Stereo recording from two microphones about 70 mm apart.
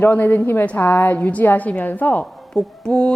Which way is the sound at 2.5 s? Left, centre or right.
Centre.